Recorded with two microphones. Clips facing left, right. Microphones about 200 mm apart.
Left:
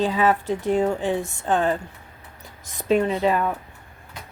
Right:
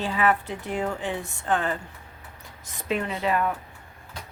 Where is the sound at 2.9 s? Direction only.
35° left (ahead or behind).